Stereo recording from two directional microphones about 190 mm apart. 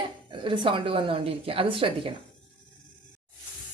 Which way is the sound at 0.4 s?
25° right (ahead or behind).